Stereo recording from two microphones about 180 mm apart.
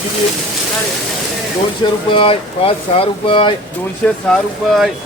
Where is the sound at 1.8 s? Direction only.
30° left (ahead or behind).